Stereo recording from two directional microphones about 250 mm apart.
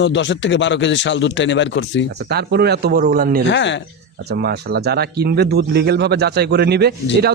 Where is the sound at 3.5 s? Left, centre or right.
Left.